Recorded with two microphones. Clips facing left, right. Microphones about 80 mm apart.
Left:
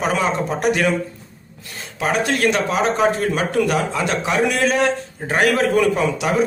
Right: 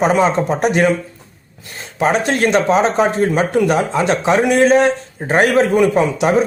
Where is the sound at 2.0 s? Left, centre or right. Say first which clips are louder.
Right 4 dB; right.